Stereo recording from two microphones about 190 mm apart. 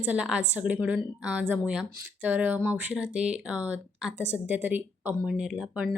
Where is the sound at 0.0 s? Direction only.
5° right (ahead or behind).